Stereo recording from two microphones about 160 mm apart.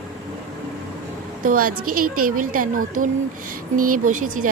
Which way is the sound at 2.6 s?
60° right (ahead or behind).